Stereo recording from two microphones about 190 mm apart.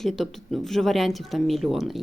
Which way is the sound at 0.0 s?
Centre (ahead or behind).